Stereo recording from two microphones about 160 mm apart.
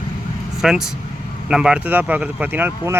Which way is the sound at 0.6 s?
5° right (ahead or behind).